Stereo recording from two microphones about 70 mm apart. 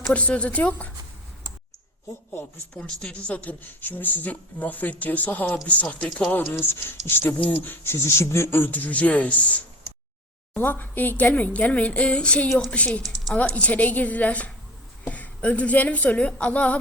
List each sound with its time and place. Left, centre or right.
0.1 s speech: centre
2.7 s speech: centre